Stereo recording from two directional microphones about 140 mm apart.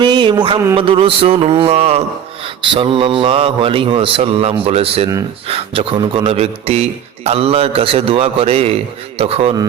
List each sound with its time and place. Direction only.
0.0 s a man's voice: 35° right (ahead or behind); by 2.0 s 50° right (ahead or behind)
2.6 s a man's voice: 40° right (ahead or behind)